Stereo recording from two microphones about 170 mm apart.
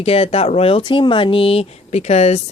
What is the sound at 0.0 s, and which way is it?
Speech, 35° left (ahead or behind).